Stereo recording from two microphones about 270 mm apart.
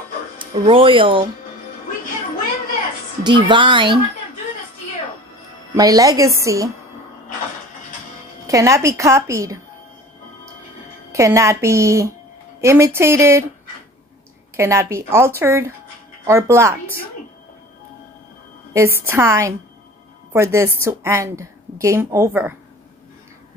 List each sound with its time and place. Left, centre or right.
0.4 s speech: centre
3.3 s a woman's voice: centre
5.8 s a woman's voice: centre
8.5 s a woman's voice: centre
11.1 s a woman's voice: centre
14.6 s a woman's voice: centre
18.7 s a woman's voice: centre